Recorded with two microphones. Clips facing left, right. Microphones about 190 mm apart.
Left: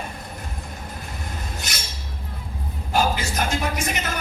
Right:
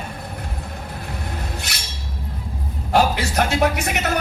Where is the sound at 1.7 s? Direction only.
65° right (ahead or behind).